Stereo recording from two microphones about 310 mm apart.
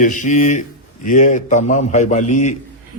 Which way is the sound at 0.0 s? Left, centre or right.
Left.